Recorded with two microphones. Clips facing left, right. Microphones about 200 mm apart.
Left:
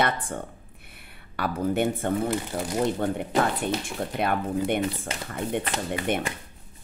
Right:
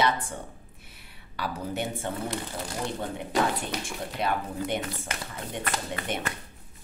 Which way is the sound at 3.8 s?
55° left (ahead or behind).